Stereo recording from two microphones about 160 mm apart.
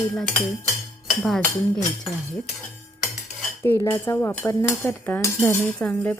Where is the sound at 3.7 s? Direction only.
15° left (ahead or behind).